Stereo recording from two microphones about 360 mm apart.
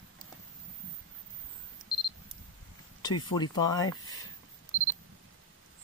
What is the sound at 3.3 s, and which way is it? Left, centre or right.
Speech, centre.